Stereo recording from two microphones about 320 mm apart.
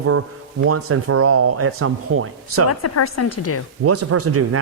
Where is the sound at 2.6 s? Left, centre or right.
Left.